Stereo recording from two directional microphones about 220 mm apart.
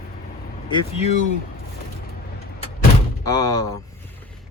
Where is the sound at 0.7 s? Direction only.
30° left (ahead or behind).